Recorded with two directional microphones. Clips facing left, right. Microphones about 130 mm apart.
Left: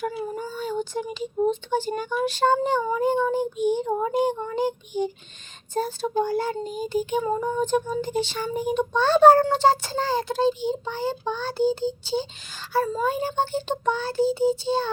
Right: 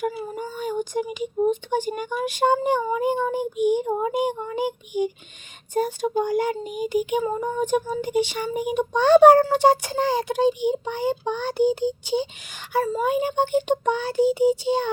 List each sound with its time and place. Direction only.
0.3 s child singing: 15° right (ahead or behind)
0.8 s speech: 10° right (ahead or behind)